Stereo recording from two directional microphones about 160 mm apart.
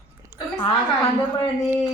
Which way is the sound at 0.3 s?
25° left (ahead or behind).